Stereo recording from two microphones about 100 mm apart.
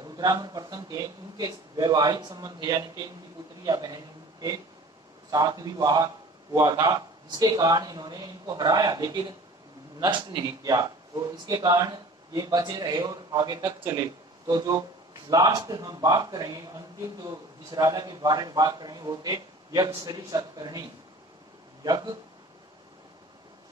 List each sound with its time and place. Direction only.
0.0 s a man's voice: 40° right (ahead or behind)
21.8 s a man's voice: 40° right (ahead or behind)